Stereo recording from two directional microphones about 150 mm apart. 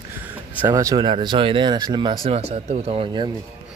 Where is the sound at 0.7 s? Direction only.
20° right (ahead or behind).